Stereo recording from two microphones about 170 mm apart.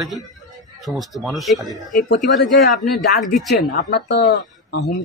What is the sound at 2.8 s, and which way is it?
Speech, 70° left (ahead or behind).